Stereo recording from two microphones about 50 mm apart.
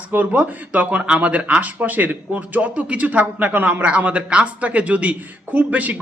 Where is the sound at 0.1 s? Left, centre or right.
Right.